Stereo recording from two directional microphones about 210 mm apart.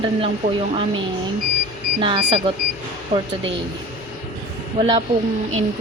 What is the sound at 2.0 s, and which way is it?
Speech, 25° right (ahead or behind).